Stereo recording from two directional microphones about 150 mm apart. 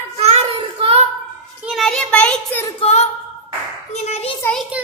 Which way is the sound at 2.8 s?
45° left (ahead or behind).